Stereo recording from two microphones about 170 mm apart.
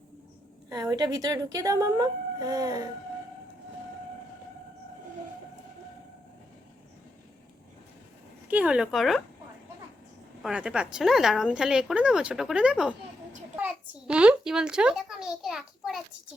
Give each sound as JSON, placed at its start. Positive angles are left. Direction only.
{"t": 0.7, "sound": "a woman's voice", "side_deg": -20}
{"t": 8.4, "sound": "speech", "side_deg": -10}
{"t": 10.4, "sound": "a child's voice", "side_deg": -5}